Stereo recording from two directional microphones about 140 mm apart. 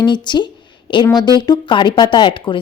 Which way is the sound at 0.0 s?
35° left (ahead or behind).